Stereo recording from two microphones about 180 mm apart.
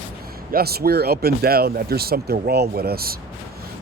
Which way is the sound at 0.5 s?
60° right (ahead or behind).